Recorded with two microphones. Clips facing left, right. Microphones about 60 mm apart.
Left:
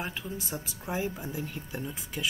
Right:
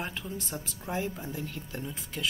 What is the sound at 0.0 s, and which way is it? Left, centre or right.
Speech, centre.